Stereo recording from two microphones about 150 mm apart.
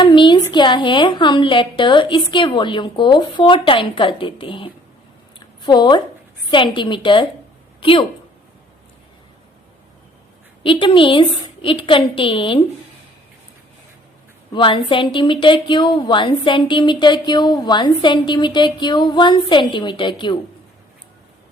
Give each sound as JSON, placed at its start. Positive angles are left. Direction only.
{"t": 0.0, "sound": "a woman's voice", "side_deg": 30}
{"t": 10.6, "sound": "a woman's voice", "side_deg": 35}
{"t": 14.5, "sound": "a woman's voice", "side_deg": 35}